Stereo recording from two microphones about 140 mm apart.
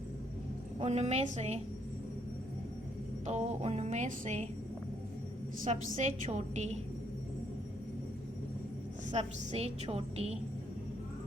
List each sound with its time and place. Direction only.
0.8 s a woman's voice: 50° right (ahead or behind)
3.2 s speech: 50° right (ahead or behind)
5.6 s a woman's voice: 55° right (ahead or behind)
9.0 s a woman's voice: 50° right (ahead or behind)